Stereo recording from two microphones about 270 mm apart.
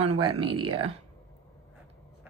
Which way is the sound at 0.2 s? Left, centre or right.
Centre.